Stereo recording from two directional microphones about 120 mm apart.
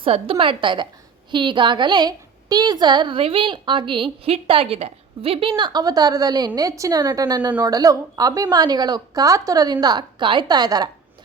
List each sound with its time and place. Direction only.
0.0 s a woman's voice: 50° right (ahead or behind)